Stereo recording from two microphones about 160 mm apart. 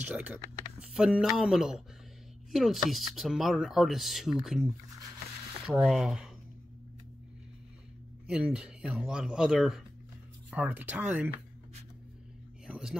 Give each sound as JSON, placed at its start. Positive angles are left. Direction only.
{"t": 0.0, "sound": "speech", "side_deg": -10}
{"t": 8.3, "sound": "speech", "side_deg": -5}
{"t": 12.6, "sound": "a sound", "side_deg": -5}